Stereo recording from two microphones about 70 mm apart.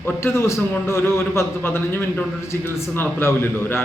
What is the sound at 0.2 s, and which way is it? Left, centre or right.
A man's voice, left.